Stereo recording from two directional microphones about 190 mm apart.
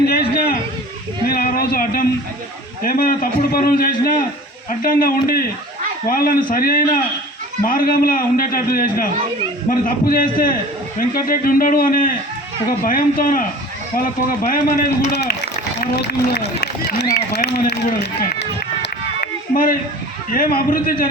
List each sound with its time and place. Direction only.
0.0 s a sound: 55° left (ahead or behind)
2.8 s a man's voice: 50° left (ahead or behind)
17.2 s run: 55° left (ahead or behind)
20.3 s a man's voice: 50° left (ahead or behind)